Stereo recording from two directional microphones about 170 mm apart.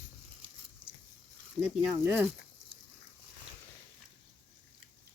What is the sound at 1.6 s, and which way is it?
Speech, 10° right (ahead or behind).